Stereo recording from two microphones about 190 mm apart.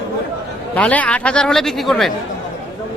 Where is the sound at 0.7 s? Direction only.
5° left (ahead or behind).